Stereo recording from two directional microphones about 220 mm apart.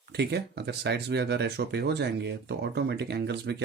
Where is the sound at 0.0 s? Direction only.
50° right (ahead or behind).